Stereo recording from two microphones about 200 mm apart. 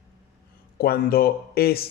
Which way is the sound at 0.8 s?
50° left (ahead or behind).